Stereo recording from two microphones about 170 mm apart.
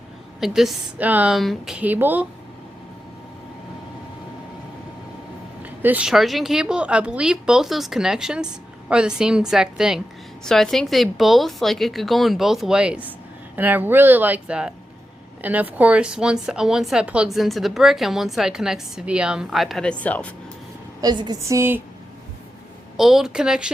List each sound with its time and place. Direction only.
0.3 s a woman's voice: centre (ahead or behind)
5.6 s a woman's voice: 10° right (ahead or behind); by 20.3 s 10° left (ahead or behind)
21.0 s a woman's voice: 25° right (ahead or behind)
23.0 s a woman's voice: centre (ahead or behind)